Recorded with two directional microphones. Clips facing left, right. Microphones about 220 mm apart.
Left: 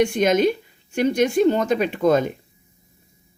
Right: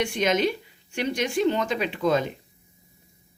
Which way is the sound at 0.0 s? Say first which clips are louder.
Left 6 dB; 45° left (ahead or behind).